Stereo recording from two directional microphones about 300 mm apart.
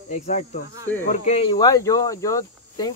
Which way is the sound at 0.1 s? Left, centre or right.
Left.